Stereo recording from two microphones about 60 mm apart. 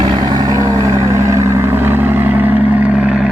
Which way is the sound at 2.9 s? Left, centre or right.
Centre.